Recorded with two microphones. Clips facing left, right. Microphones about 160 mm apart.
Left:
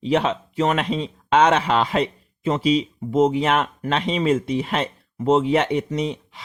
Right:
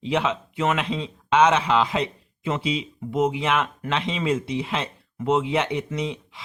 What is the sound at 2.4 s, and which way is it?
Speech, 45° left (ahead or behind).